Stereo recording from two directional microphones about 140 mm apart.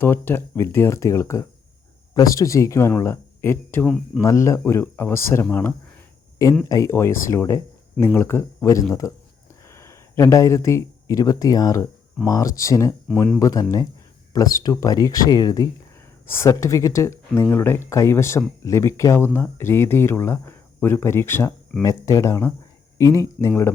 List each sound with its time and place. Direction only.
0.0 s speech: 15° left (ahead or behind)
3.8 s speech: centre (ahead or behind)
4.2 s speech: 20° left (ahead or behind)